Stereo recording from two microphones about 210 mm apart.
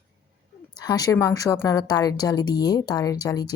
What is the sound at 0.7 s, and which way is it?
A woman's voice, 20° left (ahead or behind).